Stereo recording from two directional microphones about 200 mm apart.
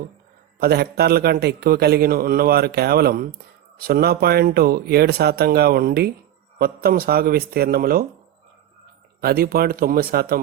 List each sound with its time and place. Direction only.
0.6 s a man's voice: 50° right (ahead or behind)
9.2 s a man's voice: 50° right (ahead or behind)